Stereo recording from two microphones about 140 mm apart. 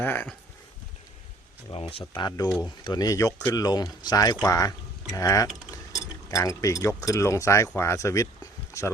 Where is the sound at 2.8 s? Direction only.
30° left (ahead or behind).